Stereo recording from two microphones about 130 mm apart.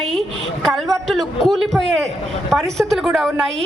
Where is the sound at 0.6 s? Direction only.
Centre (ahead or behind).